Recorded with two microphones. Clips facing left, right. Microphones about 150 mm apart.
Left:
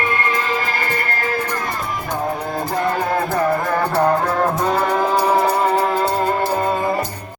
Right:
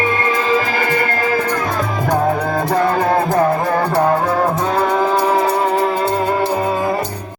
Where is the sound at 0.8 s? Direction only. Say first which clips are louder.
Right 5 dB; 90° right.